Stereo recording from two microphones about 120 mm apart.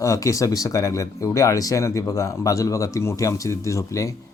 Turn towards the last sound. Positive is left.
turn(degrees=25)  # may be behind; listen again after turning